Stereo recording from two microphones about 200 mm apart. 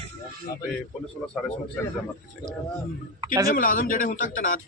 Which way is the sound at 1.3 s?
5° left (ahead or behind).